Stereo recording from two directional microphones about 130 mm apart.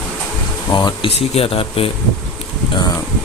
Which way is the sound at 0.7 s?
40° left (ahead or behind).